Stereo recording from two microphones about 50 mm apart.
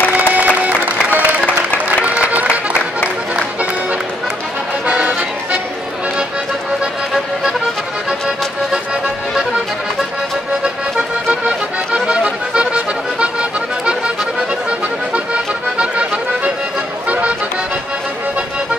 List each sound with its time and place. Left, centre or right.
0.1 s music: right
4.8 s music: right
11.4 s music: centre
15.1 s music: right